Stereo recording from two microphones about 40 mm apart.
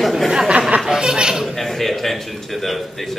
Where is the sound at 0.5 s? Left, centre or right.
Right.